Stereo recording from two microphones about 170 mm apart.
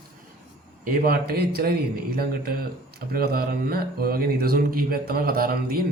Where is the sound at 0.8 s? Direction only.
60° right (ahead or behind).